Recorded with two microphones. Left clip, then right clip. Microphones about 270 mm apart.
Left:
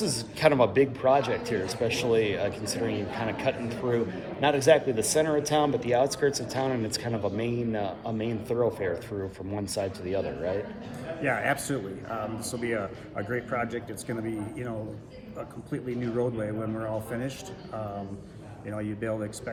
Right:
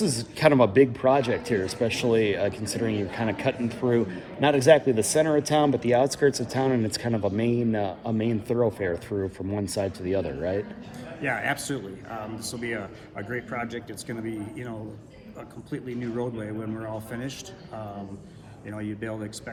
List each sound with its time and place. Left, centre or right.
0.0 s speech: right
11.2 s a man's voice: centre
18.7 s a man's voice: centre